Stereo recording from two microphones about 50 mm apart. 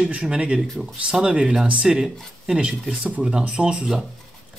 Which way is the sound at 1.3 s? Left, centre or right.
Right.